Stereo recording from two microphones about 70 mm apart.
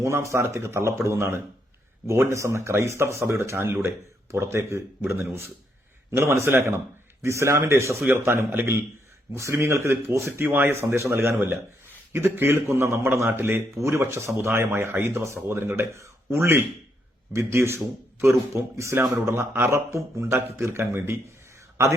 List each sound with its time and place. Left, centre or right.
0.0 s speech: right